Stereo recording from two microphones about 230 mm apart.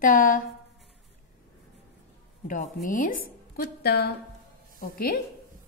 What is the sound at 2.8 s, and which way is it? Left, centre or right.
A woman's voice, left.